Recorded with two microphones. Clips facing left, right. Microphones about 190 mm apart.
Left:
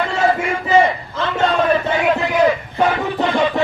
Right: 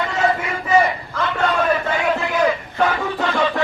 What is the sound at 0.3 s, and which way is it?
Battle cry, 25° left (ahead or behind).